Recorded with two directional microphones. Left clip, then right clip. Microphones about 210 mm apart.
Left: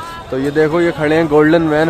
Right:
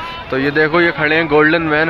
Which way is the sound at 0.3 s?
15° left (ahead or behind).